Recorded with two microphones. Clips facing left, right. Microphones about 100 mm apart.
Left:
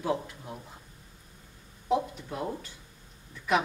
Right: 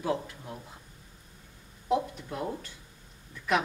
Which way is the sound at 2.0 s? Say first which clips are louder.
Even; 5° left (ahead or behind).